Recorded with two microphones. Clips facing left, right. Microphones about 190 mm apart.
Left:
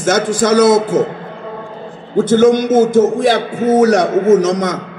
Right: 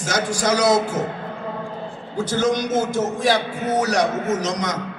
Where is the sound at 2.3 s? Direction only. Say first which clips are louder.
Left 10 dB; 50° left (ahead or behind).